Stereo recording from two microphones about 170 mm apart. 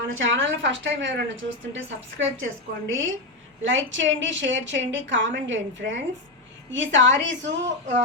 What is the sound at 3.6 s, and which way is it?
A woman's voice, 90° right.